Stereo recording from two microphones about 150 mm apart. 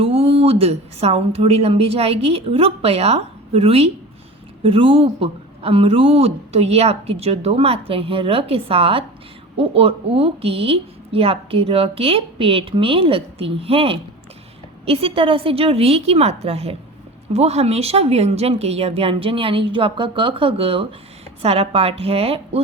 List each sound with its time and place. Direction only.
0.0 s a woman's voice: 40° right (ahead or behind)